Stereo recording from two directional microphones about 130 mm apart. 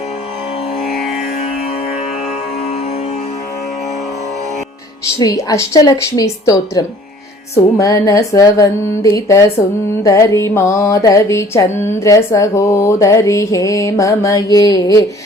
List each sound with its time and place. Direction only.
5.2 s music: 25° left (ahead or behind)